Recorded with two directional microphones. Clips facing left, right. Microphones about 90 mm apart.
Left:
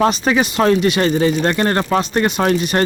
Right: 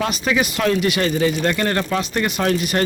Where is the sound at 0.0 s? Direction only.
35° left (ahead or behind).